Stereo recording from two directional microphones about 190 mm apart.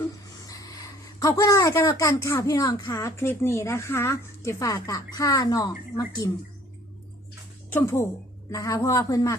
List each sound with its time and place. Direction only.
0.4 s speech: 20° left (ahead or behind)
7.7 s speech: 10° left (ahead or behind)